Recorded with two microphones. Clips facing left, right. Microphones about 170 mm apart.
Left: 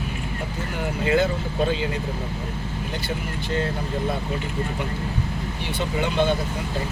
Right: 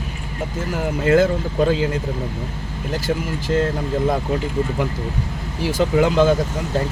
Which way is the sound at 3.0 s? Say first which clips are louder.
Right 6 dB; 90° right.